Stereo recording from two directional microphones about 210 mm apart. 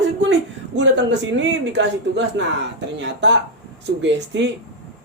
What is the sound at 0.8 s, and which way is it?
A man's voice, 55° right (ahead or behind).